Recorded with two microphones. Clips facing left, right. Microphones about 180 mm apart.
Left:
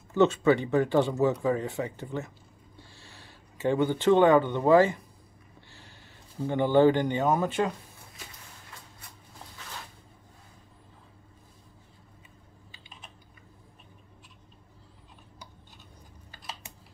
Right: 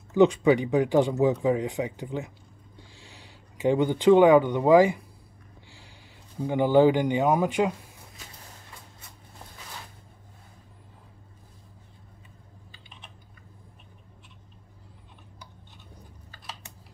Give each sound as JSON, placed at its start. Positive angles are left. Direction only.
{"t": 0.1, "sound": "speech", "side_deg": -15}
{"t": 5.7, "sound": "a sound", "side_deg": -15}
{"t": 6.4, "sound": "speech", "side_deg": -10}